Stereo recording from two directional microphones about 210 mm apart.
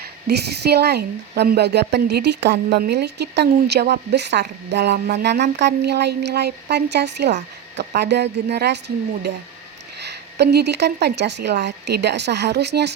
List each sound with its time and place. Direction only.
0.0 s a woman's voice: 50° right (ahead or behind)
10.0 s a woman's voice: 55° right (ahead or behind)